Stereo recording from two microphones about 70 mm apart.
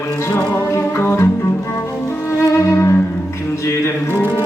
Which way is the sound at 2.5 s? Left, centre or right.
Left.